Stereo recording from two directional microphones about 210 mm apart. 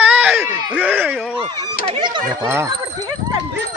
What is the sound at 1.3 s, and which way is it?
Speech, 25° right (ahead or behind).